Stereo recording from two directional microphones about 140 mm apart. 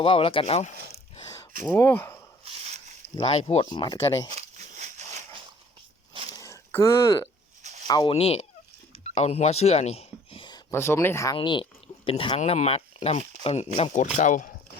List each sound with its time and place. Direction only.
0.0 s speech: 40° left (ahead or behind)
1.6 s speech: 15° left (ahead or behind)
3.2 s speech: 45° left (ahead or behind)
4.4 s a sound: 55° right (ahead or behind)
6.3 s a sound: 20° left (ahead or behind)
7.9 s speech: 30° left (ahead or behind)
8.1 s speech: 45° left (ahead or behind)
9.0 s whispering: 50° left (ahead or behind)
10.7 s speech: 20° left (ahead or behind)
11.3 s speech: 35° left (ahead or behind)
13.9 s speech: 65° left (ahead or behind)